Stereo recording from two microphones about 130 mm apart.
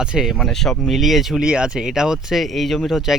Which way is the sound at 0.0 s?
5° right (ahead or behind).